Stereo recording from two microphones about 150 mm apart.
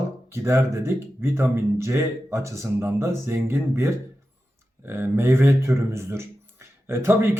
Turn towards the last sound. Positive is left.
turn(degrees=-15)  # may be behind; listen again after turning